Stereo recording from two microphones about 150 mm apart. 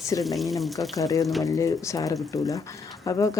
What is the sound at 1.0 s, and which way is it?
Speech, 20° left (ahead or behind).